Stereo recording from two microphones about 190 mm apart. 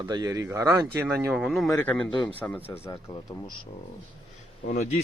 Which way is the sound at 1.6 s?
15° left (ahead or behind).